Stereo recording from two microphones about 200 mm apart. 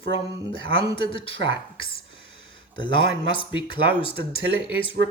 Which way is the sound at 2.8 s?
25° left (ahead or behind).